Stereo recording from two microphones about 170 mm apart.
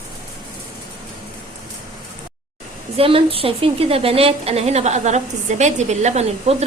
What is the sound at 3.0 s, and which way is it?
A woman's voice, 35° right (ahead or behind).